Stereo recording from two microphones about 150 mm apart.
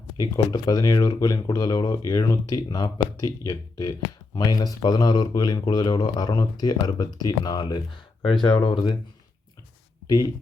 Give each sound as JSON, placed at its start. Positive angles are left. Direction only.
{"t": 0.2, "sound": "speech", "side_deg": 25}